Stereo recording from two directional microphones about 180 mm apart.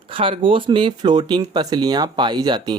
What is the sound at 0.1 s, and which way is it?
Speech, 30° right (ahead or behind).